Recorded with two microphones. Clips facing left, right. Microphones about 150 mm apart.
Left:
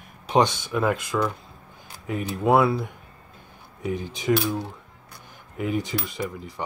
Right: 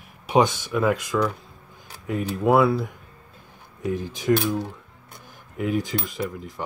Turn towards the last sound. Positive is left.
turn(degrees=0)  # may be behind; listen again after turning